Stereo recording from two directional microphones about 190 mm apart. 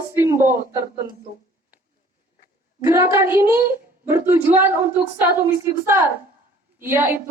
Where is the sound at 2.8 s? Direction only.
15° right (ahead or behind).